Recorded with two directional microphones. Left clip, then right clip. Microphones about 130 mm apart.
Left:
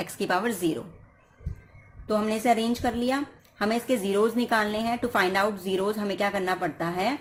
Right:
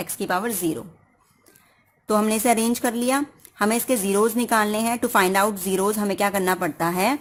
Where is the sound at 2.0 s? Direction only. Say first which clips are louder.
Right 4 dB; 60° right (ahead or behind).